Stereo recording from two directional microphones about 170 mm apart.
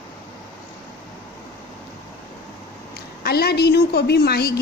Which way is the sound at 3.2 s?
70° left (ahead or behind).